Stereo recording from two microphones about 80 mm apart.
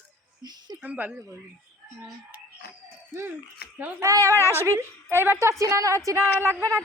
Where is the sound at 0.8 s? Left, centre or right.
Centre.